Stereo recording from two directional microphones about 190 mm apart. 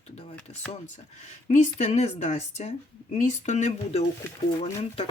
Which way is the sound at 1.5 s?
40° left (ahead or behind).